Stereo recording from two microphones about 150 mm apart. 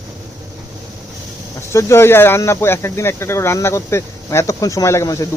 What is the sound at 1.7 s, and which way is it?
Speech, 15° left (ahead or behind).